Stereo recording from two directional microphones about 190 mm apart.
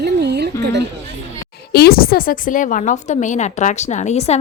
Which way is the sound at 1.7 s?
55° left (ahead or behind).